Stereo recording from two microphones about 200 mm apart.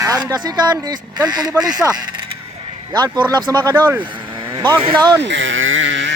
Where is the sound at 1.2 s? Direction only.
20° right (ahead or behind).